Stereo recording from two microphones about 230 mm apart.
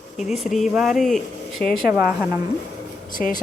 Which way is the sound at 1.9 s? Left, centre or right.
Centre.